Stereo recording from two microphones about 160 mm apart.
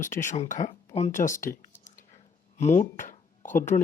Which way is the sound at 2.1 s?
45° left (ahead or behind).